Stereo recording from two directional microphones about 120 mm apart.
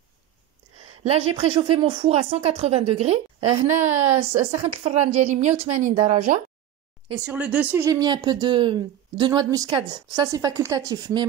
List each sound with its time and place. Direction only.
1.0 s a woman's voice: 55° right (ahead or behind); by 5.5 s 80° right
5.8 s speech: 90° right
7.3 s speech: 15° right (ahead or behind)
8.0 s a woman's voice: 35° right (ahead or behind)